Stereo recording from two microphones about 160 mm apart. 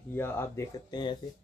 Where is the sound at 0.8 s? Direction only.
25° left (ahead or behind).